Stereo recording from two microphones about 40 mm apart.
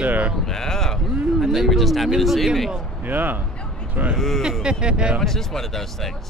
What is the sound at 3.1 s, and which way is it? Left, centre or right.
Speech, right.